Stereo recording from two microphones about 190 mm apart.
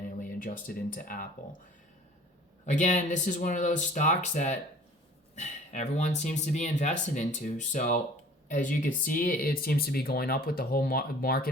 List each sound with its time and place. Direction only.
0.2 s speech: 45° left (ahead or behind)
2.6 s speech: 40° left (ahead or behind)